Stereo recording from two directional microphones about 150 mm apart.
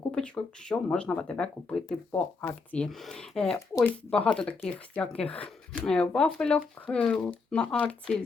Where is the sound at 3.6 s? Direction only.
20° left (ahead or behind).